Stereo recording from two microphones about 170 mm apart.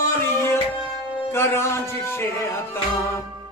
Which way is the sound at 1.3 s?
15° left (ahead or behind).